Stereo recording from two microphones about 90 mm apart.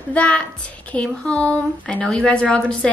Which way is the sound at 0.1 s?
15° left (ahead or behind).